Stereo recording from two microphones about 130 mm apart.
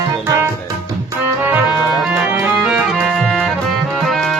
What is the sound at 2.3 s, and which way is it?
Music, 10° right (ahead or behind).